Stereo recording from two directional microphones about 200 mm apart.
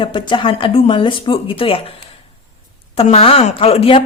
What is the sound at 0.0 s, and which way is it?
A woman's voice, 25° left (ahead or behind).